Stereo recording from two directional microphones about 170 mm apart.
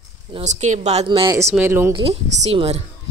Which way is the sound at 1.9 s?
35° right (ahead or behind).